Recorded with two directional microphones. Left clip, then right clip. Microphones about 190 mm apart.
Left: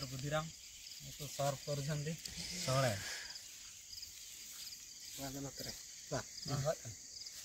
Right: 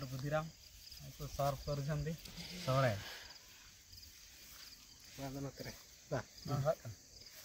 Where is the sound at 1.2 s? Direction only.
10° left (ahead or behind).